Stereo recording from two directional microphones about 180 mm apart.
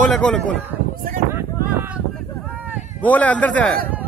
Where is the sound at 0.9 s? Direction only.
50° right (ahead or behind).